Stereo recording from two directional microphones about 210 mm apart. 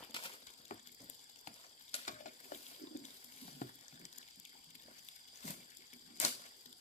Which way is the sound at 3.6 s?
35° left (ahead or behind).